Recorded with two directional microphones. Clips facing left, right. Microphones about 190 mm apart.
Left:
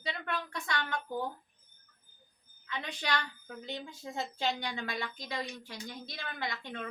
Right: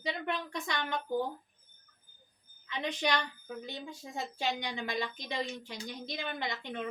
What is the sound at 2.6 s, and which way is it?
A woman's voice, 15° right (ahead or behind).